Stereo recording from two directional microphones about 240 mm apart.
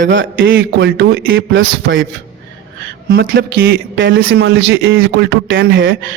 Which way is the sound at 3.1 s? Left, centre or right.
Right.